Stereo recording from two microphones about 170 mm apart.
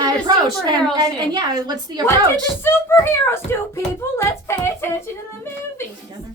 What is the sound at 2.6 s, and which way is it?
Speech, 15° left (ahead or behind).